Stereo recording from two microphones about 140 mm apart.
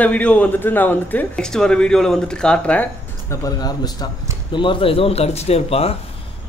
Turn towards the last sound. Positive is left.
turn(degrees=45)  # may be behind; listen again after turning